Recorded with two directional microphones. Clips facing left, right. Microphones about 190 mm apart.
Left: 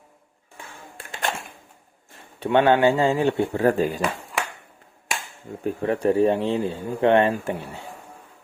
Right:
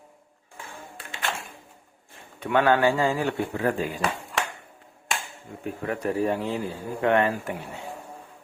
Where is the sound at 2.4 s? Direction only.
25° left (ahead or behind).